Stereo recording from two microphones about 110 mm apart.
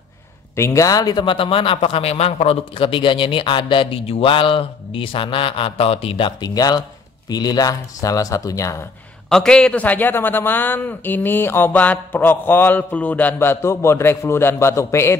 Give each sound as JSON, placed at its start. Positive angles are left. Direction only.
{"t": 0.6, "sound": "a man's voice", "side_deg": 25}
{"t": 6.5, "sound": "speech", "side_deg": 35}
{"t": 9.3, "sound": "a man's voice", "side_deg": 5}